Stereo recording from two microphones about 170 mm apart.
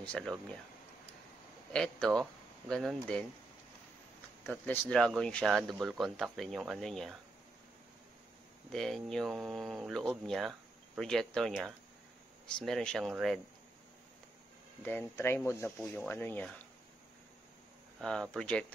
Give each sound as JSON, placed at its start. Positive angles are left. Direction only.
{"t": 0.0, "sound": "speech", "side_deg": 5}
{"t": 1.7, "sound": "speech", "side_deg": 5}
{"t": 4.5, "sound": "speech", "side_deg": 5}
{"t": 8.7, "sound": "speech", "side_deg": 0}
{"t": 14.8, "sound": "speech", "side_deg": 10}
{"t": 18.0, "sound": "speech", "side_deg": 5}